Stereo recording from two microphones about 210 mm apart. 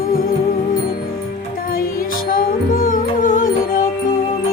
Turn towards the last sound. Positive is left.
turn(degrees=40)  # may be behind; listen again after turning